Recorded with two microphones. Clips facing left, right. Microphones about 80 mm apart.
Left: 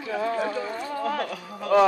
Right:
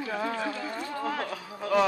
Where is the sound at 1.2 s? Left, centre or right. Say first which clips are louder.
Left 3 dB; right.